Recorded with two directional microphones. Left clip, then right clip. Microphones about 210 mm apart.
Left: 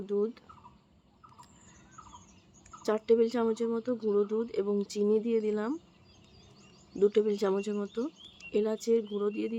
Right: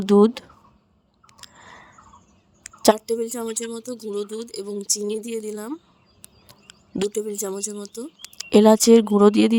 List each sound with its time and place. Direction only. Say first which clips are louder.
0.0 s speech: right 15 dB; 50° right (ahead or behind)
1.4 s a sound: right 12 dB; 55° right (ahead or behind)
3.1 s speech: even; centre (ahead or behind)
7.1 s speech: even; centre (ahead or behind)
8.2 s speech: right 17 dB; 55° right (ahead or behind)